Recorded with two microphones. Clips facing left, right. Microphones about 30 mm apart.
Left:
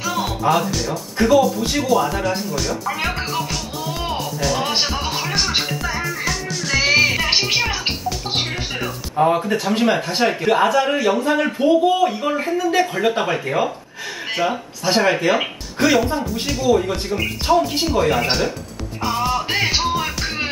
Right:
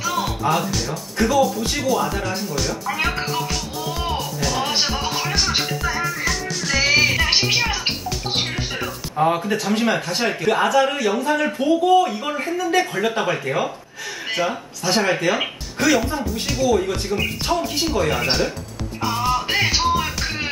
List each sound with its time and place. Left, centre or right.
0.0 s music: centre
1.4 s speech: centre
4.1 s music: centre
9.1 s speech: centre
19.0 s music: centre